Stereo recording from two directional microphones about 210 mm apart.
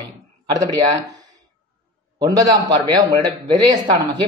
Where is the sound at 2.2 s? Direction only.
15° right (ahead or behind).